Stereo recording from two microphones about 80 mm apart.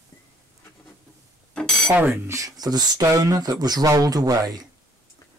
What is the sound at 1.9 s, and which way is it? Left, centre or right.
Cutlery, right.